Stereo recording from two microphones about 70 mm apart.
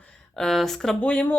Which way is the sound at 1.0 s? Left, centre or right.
Centre.